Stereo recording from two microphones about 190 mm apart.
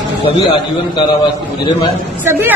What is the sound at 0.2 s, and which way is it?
Speech, 25° left (ahead or behind).